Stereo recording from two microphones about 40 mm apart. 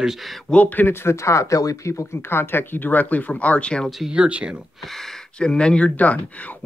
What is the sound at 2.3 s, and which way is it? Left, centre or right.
Speech, left.